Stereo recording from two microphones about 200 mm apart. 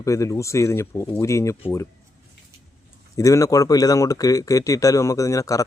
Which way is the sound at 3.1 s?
15° left (ahead or behind).